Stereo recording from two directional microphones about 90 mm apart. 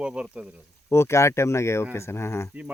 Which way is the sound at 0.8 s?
30° left (ahead or behind).